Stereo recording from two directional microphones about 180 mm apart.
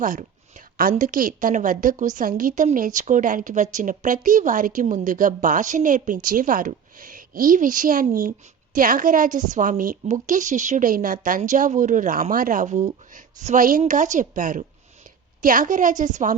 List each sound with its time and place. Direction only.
0.0 s a woman's voice: 45° right (ahead or behind)